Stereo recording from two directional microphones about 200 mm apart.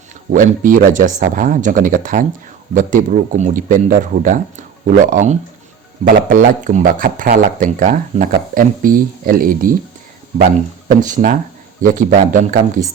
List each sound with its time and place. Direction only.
0.3 s speech: 40° right (ahead or behind)
11.0 s speech: 40° right (ahead or behind)